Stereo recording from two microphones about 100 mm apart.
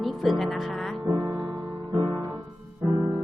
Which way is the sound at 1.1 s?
35° right (ahead or behind).